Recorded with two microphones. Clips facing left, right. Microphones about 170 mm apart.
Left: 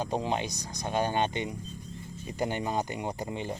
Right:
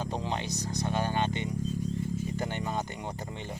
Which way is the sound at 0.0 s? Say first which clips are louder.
Left 3 dB; 15° left (ahead or behind).